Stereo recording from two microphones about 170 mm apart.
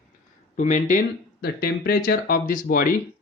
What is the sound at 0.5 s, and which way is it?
Speech, 45° left (ahead or behind).